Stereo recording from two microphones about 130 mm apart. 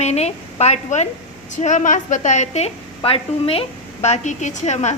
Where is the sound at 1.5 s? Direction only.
75° left (ahead or behind).